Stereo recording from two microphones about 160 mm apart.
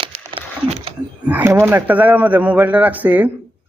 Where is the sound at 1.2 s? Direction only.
10° right (ahead or behind).